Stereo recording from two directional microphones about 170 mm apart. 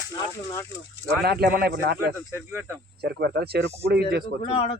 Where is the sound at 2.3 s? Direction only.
15° right (ahead or behind).